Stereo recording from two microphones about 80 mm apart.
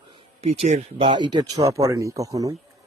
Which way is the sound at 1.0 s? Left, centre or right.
Right.